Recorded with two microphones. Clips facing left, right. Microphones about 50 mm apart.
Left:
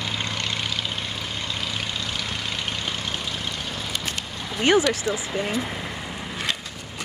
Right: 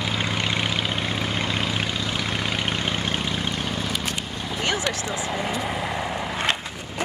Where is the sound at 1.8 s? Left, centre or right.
Centre.